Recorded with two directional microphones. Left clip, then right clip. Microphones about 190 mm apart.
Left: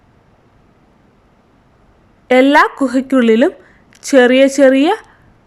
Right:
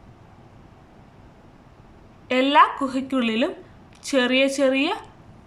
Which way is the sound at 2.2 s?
40° left (ahead or behind).